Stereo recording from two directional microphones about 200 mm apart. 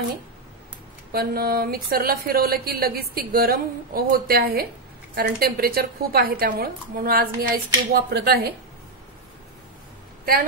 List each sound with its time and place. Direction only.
1.1 s speech: 50° right (ahead or behind)